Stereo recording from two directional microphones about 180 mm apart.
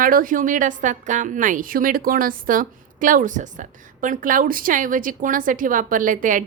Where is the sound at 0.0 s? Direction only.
50° right (ahead or behind).